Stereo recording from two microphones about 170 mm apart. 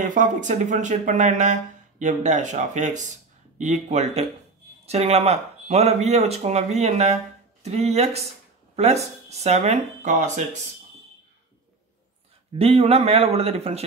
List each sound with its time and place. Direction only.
0.0 s speech: 50° right (ahead or behind)
12.5 s speech: 35° right (ahead or behind)